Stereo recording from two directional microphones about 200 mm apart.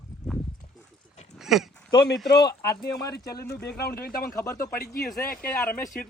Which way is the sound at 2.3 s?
55° left (ahead or behind).